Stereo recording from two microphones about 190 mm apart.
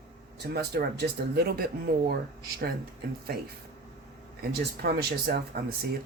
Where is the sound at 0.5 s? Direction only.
55° right (ahead or behind).